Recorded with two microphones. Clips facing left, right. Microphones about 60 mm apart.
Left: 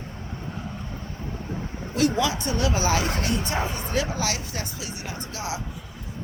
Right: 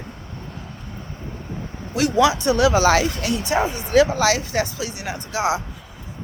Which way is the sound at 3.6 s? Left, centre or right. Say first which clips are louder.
Right 6 dB; centre.